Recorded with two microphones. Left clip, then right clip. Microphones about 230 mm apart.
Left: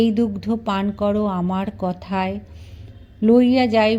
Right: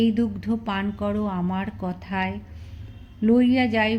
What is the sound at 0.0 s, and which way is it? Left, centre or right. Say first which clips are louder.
A woman's voice: left 4 dB; left.